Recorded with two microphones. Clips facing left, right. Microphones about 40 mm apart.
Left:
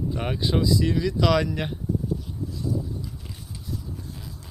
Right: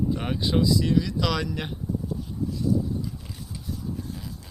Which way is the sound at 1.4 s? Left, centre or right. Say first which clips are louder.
Left 3 dB; centre.